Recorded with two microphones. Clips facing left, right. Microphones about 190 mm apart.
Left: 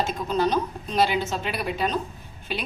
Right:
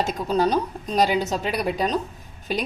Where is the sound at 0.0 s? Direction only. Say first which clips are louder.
Right 2 dB; 35° right (ahead or behind).